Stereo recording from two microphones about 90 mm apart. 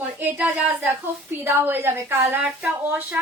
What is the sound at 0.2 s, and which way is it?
Speech, 15° right (ahead or behind).